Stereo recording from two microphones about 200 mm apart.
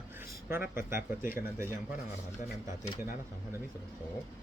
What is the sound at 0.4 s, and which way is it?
Speech, 10° right (ahead or behind).